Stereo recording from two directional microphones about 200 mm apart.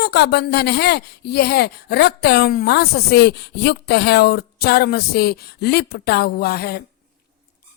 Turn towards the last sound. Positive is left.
turn(degrees=50)  # may be behind; listen again after turning